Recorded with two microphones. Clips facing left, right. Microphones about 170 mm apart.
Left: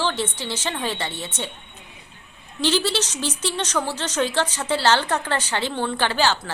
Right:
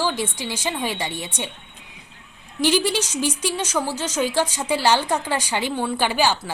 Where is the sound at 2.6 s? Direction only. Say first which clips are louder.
Right 2 dB; 15° right (ahead or behind).